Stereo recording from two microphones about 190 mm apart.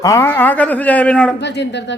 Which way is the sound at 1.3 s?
65° left (ahead or behind).